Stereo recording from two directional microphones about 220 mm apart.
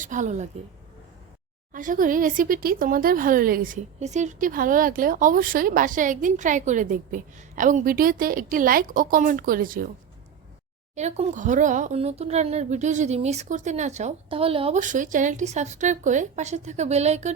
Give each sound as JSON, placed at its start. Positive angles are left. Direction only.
{"t": 0.0, "sound": "speech", "side_deg": -35}
{"t": 1.7, "sound": "speech", "side_deg": -35}
{"t": 10.9, "sound": "speech", "side_deg": -30}